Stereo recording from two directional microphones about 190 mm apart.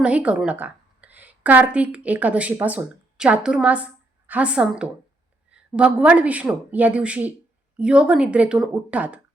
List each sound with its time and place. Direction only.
0.0 s a woman's voice: 5° right (ahead or behind)